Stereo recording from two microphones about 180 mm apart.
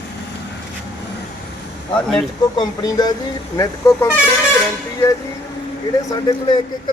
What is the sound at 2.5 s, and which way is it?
Speech, 20° left (ahead or behind).